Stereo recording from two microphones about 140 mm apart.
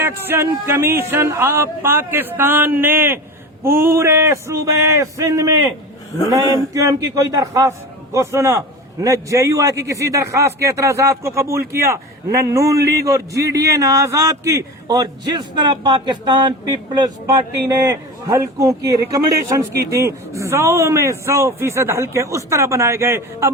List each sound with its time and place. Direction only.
0.0 s a man's voice: 15° right (ahead or behind)
6.7 s a man's voice: 25° right (ahead or behind)